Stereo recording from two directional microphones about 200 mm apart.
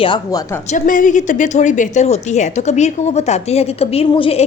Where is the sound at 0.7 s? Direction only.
40° left (ahead or behind).